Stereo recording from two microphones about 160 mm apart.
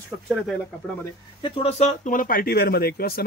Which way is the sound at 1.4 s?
40° left (ahead or behind).